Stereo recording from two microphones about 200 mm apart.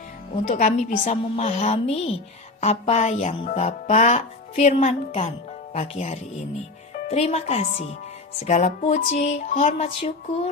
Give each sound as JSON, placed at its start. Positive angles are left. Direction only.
{"t": 0.5, "sound": "speech", "side_deg": 35}